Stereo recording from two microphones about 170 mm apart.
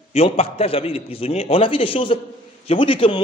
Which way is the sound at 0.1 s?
35° left (ahead or behind).